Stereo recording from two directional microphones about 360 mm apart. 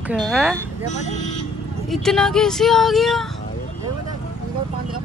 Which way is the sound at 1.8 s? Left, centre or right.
Centre.